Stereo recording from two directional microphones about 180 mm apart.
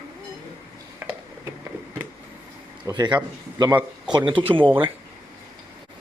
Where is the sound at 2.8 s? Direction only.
25° right (ahead or behind).